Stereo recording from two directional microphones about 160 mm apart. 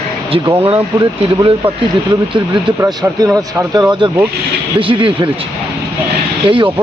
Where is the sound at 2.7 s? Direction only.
20° right (ahead or behind).